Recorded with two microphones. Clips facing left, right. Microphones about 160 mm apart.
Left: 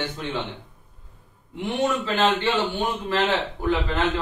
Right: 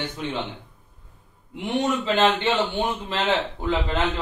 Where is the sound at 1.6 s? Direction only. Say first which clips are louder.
Even; 20° right (ahead or behind).